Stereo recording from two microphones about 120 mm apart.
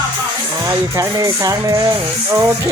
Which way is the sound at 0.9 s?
25° right (ahead or behind).